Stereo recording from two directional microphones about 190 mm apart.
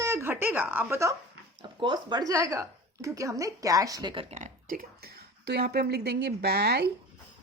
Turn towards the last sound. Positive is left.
turn(degrees=-60)  # may be behind; listen again after turning